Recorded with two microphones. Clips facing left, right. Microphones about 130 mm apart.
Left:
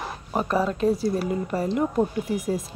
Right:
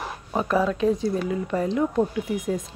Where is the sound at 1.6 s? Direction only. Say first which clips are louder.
Even; 10° left (ahead or behind).